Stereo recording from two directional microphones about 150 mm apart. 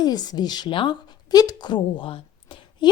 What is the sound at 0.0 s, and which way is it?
A woman's voice, 25° left (ahead or behind).